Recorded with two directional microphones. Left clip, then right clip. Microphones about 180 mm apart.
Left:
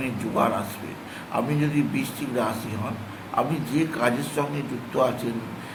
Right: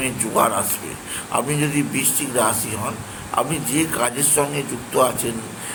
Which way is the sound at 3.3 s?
20° right (ahead or behind).